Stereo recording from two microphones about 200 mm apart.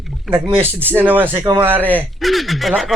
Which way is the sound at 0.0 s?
5° right (ahead or behind).